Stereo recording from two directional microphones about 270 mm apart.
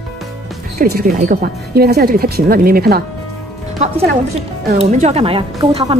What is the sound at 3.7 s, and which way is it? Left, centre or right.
A woman's voice, right.